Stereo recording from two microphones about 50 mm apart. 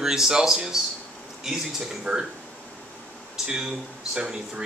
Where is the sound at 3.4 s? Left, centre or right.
Centre.